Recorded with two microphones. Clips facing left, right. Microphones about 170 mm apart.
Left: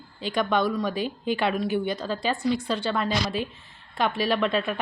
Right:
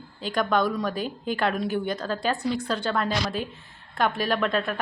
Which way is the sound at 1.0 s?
45° right (ahead or behind).